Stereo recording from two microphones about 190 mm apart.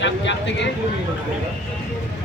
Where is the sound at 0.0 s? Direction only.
70° left (ahead or behind).